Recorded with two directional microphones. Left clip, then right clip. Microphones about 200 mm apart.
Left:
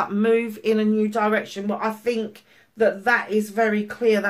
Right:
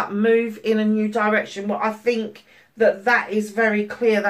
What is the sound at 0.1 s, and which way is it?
Speech, 50° left (ahead or behind).